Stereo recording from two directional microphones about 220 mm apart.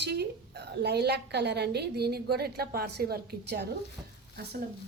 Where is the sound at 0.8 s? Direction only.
45° right (ahead or behind).